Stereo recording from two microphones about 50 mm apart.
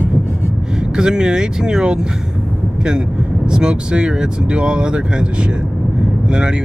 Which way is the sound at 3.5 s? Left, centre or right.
Centre.